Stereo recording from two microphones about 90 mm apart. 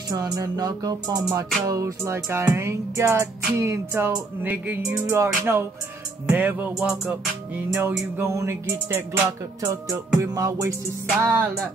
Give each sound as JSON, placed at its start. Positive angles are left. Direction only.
{"t": 0.1, "sound": "music", "side_deg": -45}
{"t": 4.8, "sound": "music", "side_deg": -35}
{"t": 6.8, "sound": "music", "side_deg": -10}
{"t": 7.7, "sound": "music", "side_deg": -30}
{"t": 9.7, "sound": "music", "side_deg": -40}